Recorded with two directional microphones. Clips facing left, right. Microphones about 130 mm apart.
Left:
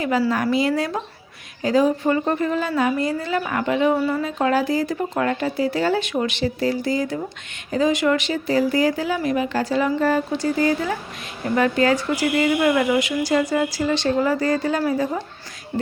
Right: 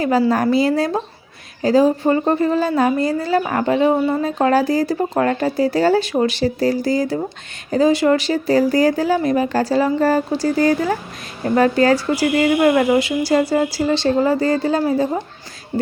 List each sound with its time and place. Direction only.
0.5 s speech: 35° right (ahead or behind)
3.9 s speech: 25° right (ahead or behind)
4.2 s speech: 40° right (ahead or behind)